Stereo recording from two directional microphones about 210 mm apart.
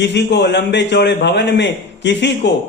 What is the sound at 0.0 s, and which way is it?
A man's voice, 55° left (ahead or behind).